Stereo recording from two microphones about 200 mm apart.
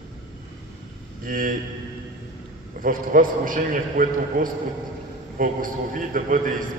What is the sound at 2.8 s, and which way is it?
A man's voice, 45° right (ahead or behind).